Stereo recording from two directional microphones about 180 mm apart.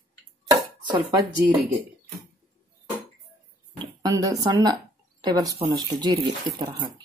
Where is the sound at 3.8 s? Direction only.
20° right (ahead or behind).